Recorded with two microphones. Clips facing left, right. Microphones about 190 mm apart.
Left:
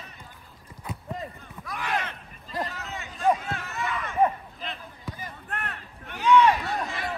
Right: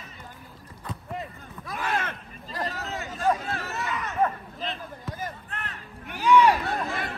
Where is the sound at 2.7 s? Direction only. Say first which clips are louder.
Right 4 dB; 40° right (ahead or behind).